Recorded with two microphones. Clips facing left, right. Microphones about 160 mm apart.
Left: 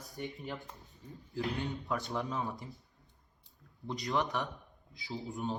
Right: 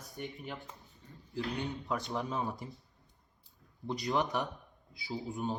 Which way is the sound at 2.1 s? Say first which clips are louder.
Right 1 dB; 20° right (ahead or behind).